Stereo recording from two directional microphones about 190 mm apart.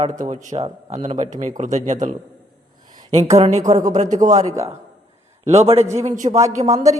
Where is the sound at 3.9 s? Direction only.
35° right (ahead or behind).